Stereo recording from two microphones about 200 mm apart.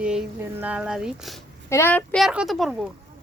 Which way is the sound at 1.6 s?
10° left (ahead or behind).